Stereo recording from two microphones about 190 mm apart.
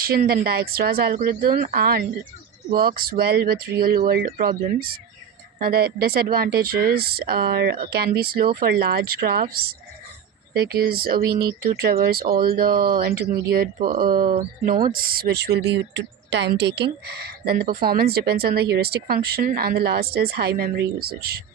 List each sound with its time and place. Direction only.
0.3 s speech: 55° right (ahead or behind)